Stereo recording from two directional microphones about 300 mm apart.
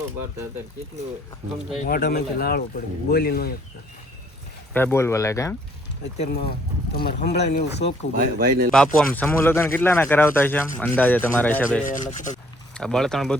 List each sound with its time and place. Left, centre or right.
1.8 s speech: left
4.7 s speech: centre
6.1 s speech: left
8.2 s speech: right
8.7 s speech: centre
11.9 s speech: left
12.7 s speech: centre